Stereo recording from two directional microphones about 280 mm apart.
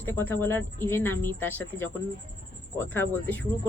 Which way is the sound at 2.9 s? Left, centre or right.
Centre.